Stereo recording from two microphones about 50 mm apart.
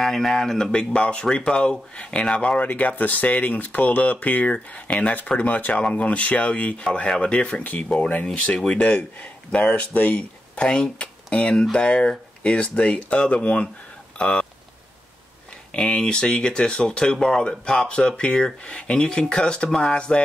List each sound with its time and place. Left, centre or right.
0.0 s speech: centre
7.6 s speech: left
14.1 s a sound: left
15.7 s speech: centre